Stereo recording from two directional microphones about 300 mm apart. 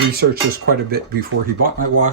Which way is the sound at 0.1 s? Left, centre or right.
Right.